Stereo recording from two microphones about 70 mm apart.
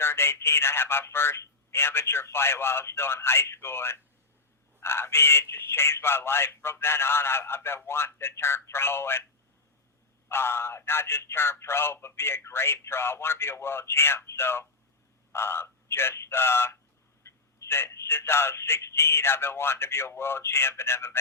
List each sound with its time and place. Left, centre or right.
0.0 s speech: left
10.2 s speech: left